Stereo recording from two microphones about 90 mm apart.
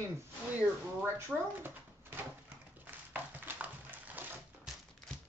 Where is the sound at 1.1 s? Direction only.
25° right (ahead or behind).